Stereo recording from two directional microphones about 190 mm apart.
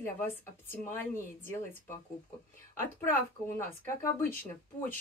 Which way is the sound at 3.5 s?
15° left (ahead or behind).